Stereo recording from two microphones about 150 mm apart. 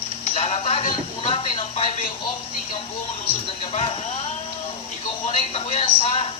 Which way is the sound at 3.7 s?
40° left (ahead or behind).